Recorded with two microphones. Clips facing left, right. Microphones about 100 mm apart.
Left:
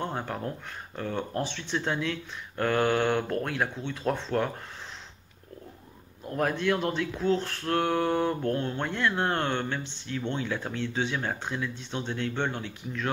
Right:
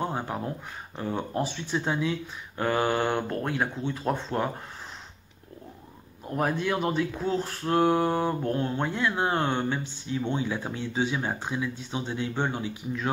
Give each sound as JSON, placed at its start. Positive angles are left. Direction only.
{"t": 0.0, "sound": "speech", "side_deg": -10}
{"t": 6.3, "sound": "speech", "side_deg": -10}